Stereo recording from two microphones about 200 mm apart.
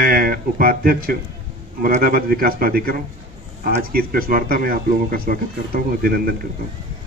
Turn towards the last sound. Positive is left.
turn(degrees=-45)  # may be behind; listen again after turning